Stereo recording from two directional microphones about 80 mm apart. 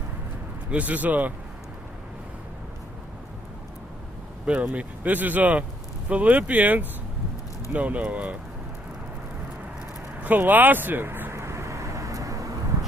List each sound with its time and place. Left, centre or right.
0.7 s speech: centre
4.4 s speech: centre
10.2 s vehicle: right